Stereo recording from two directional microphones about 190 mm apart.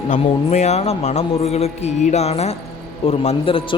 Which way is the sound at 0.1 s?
35° left (ahead or behind).